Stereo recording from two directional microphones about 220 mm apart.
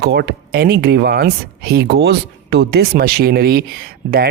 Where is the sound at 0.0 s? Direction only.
50° right (ahead or behind).